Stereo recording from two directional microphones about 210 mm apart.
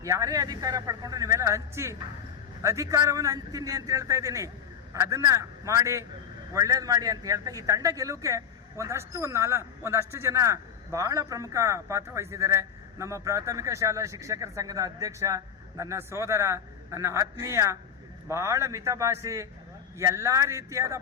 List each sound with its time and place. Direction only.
0.0 s a man's voice: 15° right (ahead or behind)